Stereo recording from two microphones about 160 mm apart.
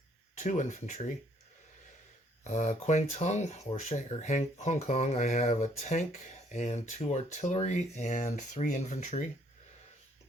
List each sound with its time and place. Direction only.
0.3 s speech: 50° left (ahead or behind)
2.4 s speech: 45° left (ahead or behind)